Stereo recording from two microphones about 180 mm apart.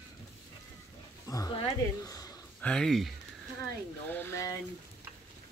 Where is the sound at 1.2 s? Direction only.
20° left (ahead or behind).